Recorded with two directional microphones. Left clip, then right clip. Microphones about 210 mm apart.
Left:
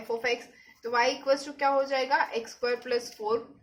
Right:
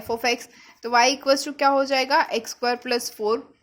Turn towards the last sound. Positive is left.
turn(degrees=-50)  # may be behind; listen again after turning